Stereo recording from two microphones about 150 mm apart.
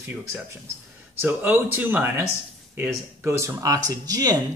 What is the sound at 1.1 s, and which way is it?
Speech, 15° right (ahead or behind).